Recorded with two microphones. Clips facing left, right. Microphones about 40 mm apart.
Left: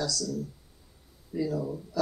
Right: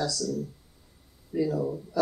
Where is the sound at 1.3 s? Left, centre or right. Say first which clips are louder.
Right 3 dB; centre.